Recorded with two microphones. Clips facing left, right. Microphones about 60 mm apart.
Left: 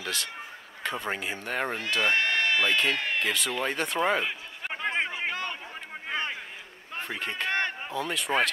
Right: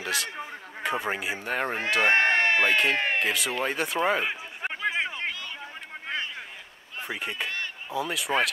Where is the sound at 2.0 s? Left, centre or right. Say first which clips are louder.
Right 4 dB; right.